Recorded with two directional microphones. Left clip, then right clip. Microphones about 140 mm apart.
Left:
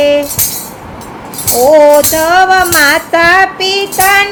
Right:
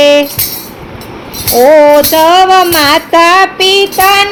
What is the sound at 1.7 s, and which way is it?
Music, 40° right (ahead or behind).